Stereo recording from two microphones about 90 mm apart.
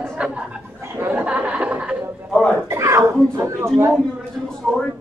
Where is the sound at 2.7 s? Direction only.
30° right (ahead or behind).